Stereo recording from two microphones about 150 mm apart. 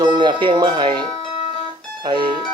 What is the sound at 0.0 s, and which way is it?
Speech, 30° right (ahead or behind).